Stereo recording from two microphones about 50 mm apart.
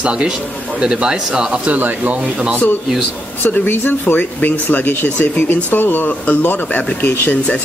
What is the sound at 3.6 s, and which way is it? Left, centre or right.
Speech, left.